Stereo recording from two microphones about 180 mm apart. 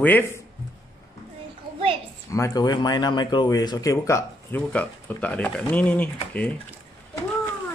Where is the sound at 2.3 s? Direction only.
15° left (ahead or behind).